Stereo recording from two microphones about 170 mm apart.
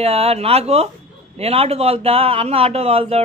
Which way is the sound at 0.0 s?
35° right (ahead or behind).